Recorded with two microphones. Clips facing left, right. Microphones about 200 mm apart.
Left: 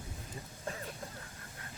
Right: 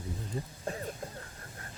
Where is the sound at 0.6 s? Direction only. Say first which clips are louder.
Right 3 dB; 30° right (ahead or behind).